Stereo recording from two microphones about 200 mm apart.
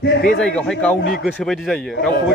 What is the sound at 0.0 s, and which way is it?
Speech, 55° left (ahead or behind).